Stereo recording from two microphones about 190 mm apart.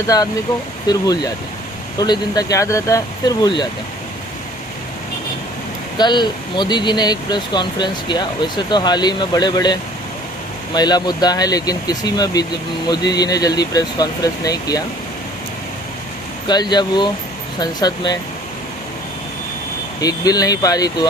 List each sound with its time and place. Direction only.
0.1 s speech: 20° left (ahead or behind)
6.0 s speech: 25° left (ahead or behind)
10.8 s speech: 20° left (ahead or behind)
16.5 s speech: 20° left (ahead or behind)
20.0 s speech: 20° left (ahead or behind)